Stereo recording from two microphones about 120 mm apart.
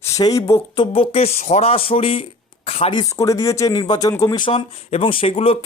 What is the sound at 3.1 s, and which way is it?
Speech, 25° left (ahead or behind).